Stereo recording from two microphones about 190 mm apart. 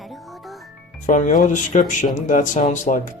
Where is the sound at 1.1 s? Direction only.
40° left (ahead or behind).